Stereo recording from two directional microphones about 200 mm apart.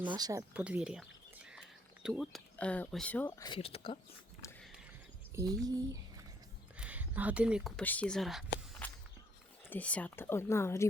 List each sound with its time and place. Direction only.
0.2 s speech: 20° right (ahead or behind)
0.5 s a sound: 5° right (ahead or behind)
2.0 s speech: centre (ahead or behind); by 3.9 s 25° left (ahead or behind)
5.3 s speech: 15° right (ahead or behind)
6.7 s a sound: 5° right (ahead or behind)
7.8 s speech: 5° left (ahead or behind)
8.8 s walk: 5° left (ahead or behind)
9.6 s speech: 5° left (ahead or behind)